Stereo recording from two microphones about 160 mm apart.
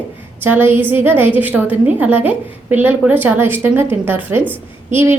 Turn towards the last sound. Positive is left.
turn(degrees=-15)  # may be behind; listen again after turning